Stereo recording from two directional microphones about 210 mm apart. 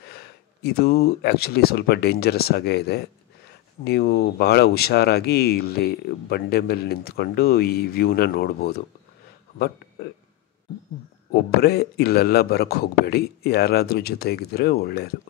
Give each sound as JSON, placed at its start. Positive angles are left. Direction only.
{"t": 0.1, "sound": "speech", "side_deg": 50}
{"t": 11.3, "sound": "speech", "side_deg": 50}